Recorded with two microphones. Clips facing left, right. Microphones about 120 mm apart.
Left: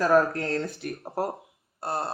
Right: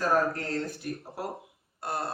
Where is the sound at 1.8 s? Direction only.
35° left (ahead or behind).